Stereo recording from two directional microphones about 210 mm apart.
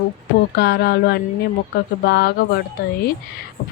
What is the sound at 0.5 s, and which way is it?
Speech, 50° left (ahead or behind).